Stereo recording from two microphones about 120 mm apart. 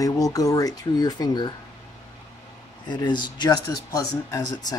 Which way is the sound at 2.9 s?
40° left (ahead or behind).